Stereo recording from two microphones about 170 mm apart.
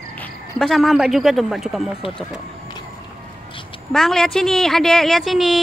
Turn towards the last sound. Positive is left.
turn(degrees=0)  # may be behind; listen again after turning